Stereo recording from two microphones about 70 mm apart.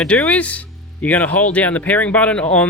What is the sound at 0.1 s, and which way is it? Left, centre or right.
Speech, centre.